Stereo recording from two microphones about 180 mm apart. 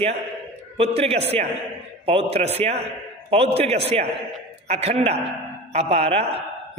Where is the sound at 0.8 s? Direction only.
35° right (ahead or behind).